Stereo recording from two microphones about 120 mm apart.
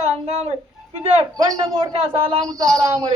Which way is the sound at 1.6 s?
50° right (ahead or behind).